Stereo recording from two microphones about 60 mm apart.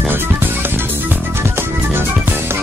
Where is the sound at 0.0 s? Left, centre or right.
Right.